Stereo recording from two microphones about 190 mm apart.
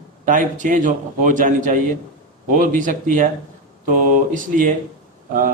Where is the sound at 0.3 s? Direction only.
40° right (ahead or behind).